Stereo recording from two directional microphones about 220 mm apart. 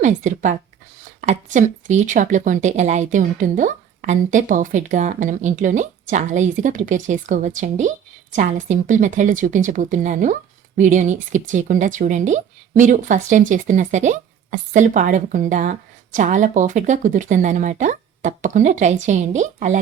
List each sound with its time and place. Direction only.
0.0 s a woman's voice: 35° right (ahead or behind)